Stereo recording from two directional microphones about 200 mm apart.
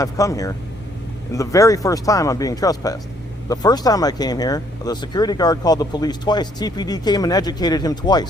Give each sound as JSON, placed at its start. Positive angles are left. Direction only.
{"t": 0.0, "sound": "speech", "side_deg": 15}